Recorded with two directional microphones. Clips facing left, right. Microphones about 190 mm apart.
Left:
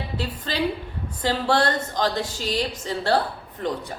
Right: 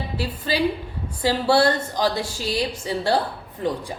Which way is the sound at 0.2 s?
10° right (ahead or behind).